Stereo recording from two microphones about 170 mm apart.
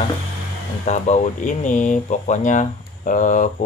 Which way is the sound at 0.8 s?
45° left (ahead or behind).